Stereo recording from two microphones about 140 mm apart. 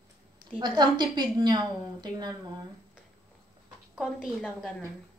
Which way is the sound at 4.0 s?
Centre (ahead or behind).